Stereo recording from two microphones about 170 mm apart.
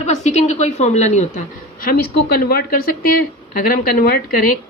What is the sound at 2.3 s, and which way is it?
A woman's voice, 65° left (ahead or behind).